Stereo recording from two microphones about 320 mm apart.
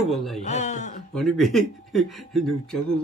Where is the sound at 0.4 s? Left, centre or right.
Left.